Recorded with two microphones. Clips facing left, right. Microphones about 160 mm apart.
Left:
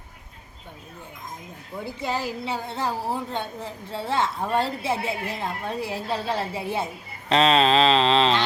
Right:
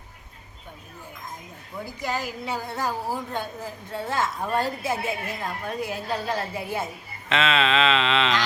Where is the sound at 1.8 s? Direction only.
25° left (ahead or behind).